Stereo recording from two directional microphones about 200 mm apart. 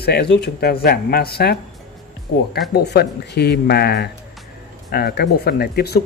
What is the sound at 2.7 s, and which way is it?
Speech, 55° left (ahead or behind).